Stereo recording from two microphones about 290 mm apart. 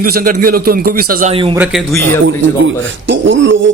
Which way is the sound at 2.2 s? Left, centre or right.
Right.